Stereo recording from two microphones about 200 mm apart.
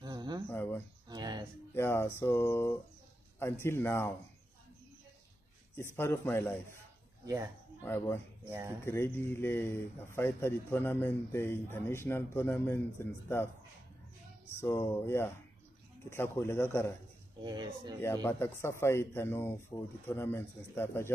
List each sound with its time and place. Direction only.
0.0 s a sound: 20° right (ahead or behind)
0.5 s speech: 10° left (ahead or behind)
1.0 s a sound: 20° right (ahead or behind)
1.7 s a man's voice: 10° left (ahead or behind)
5.8 s a man's voice: 10° left (ahead or behind)
7.8 s a man's voice: 10° left (ahead or behind)
8.5 s speech: 10° right (ahead or behind)
8.8 s a man's voice: 10° left (ahead or behind)
14.5 s a man's voice: 10° left (ahead or behind)
17.4 s speech: 20° right (ahead or behind)
18.0 s a man's voice: 10° left (ahead or behind)